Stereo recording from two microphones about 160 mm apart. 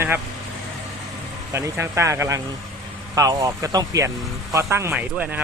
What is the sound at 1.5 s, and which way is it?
Speech, 15° right (ahead or behind).